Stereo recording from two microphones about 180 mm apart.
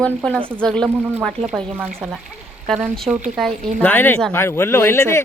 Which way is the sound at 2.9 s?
Centre (ahead or behind).